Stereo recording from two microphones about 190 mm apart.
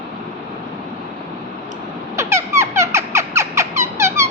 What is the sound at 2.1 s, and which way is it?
Squeak, 15° right (ahead or behind).